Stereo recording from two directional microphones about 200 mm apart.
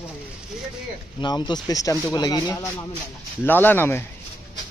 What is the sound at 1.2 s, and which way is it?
A man's voice, 20° left (ahead or behind).